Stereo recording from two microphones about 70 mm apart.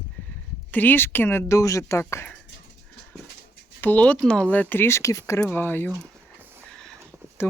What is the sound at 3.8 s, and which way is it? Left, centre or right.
Speech, left.